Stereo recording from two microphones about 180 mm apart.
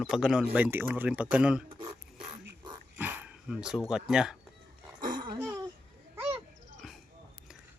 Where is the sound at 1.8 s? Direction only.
25° right (ahead or behind).